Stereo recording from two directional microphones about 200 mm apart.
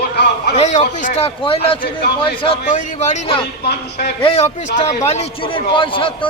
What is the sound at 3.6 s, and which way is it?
Speech, 55° left (ahead or behind).